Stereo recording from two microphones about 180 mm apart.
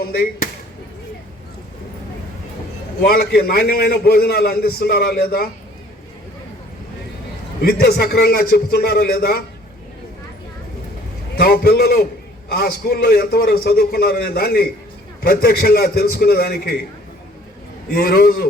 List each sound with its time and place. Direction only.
3.1 s a man's voice: 55° left (ahead or behind)
7.6 s a man's voice: 60° left (ahead or behind)
11.3 s a man's voice: 55° left (ahead or behind)
17.8 s a man's voice: 60° left (ahead or behind)